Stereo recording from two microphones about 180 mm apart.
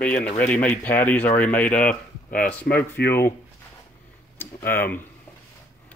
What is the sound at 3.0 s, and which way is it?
Speech, 65° left (ahead or behind).